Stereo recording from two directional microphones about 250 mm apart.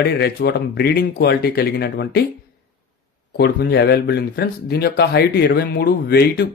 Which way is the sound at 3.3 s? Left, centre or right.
Left.